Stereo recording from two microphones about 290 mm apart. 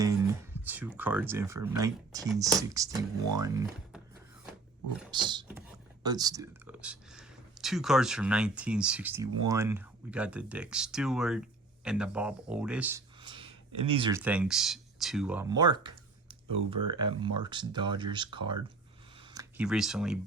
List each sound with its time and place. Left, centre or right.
0.0 s speech: centre
5.1 s speech: centre
13.2 s a sound: centre
13.9 s speech: centre
14.2 s speech: centre